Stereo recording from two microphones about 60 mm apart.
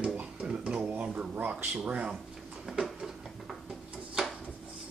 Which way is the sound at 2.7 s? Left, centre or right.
Centre.